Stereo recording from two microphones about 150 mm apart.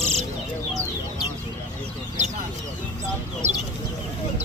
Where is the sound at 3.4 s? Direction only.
50° right (ahead or behind).